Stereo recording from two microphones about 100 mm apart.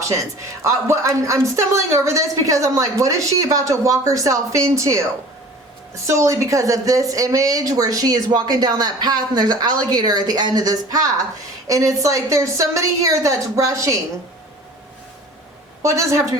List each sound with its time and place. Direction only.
0.0 s a woman's voice: 30° right (ahead or behind)
15.8 s a woman's voice: 30° right (ahead or behind)